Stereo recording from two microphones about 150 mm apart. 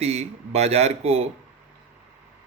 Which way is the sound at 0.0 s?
45° right (ahead or behind).